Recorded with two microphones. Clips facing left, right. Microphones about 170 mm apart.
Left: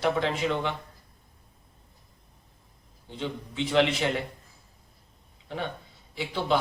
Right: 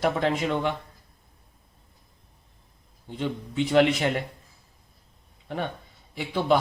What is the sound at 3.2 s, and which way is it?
Speech, 45° right (ahead or behind).